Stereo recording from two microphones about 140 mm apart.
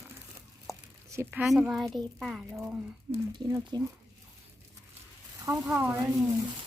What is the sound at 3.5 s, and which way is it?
Speech, 25° right (ahead or behind).